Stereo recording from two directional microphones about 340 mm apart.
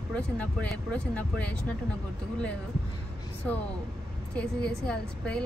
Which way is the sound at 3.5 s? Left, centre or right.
Centre.